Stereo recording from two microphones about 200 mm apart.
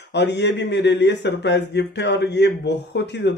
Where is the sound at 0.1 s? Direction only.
60° left (ahead or behind).